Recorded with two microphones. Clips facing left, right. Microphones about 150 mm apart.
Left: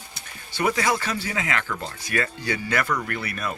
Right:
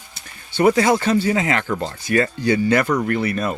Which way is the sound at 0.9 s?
25° right (ahead or behind).